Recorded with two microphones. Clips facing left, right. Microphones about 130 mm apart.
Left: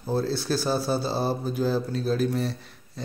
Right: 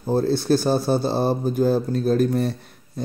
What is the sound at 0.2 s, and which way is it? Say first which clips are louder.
Speech: right 7 dB; 50° right (ahead or behind).